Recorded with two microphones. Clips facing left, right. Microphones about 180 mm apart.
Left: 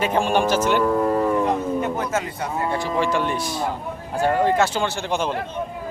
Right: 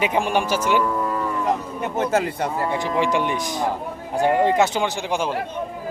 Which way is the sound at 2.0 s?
30° right (ahead or behind).